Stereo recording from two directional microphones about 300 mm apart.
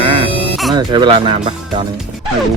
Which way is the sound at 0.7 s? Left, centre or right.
Centre.